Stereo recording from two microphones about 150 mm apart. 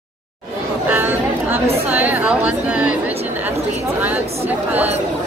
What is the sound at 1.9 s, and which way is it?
Speech, 10° right (ahead or behind).